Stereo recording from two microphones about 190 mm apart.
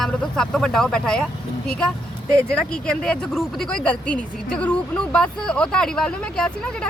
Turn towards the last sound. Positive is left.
turn(degrees=5)  # may be behind; listen again after turning